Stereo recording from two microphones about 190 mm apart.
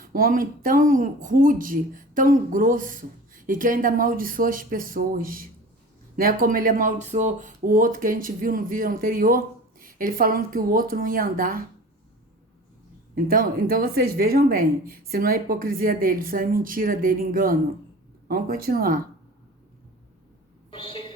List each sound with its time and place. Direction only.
0.0 s speech: 50° right (ahead or behind)
13.1 s speech: 50° right (ahead or behind)
20.7 s a sound: 30° left (ahead or behind)